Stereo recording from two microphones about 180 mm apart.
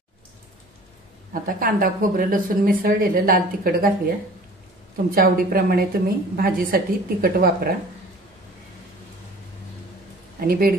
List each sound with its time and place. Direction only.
1.3 s speech: 50° right (ahead or behind)
5.1 s a woman's voice: 55° right (ahead or behind)
10.4 s a woman's voice: 55° right (ahead or behind)